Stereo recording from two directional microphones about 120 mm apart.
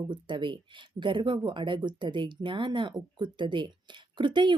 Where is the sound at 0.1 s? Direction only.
40° right (ahead or behind).